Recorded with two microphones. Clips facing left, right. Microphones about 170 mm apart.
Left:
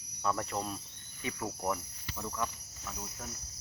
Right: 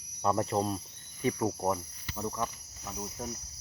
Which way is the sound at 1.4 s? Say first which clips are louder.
Right 5 dB; 25° right (ahead or behind).